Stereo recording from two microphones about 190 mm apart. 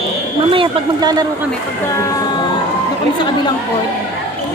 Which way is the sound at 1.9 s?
15° left (ahead or behind).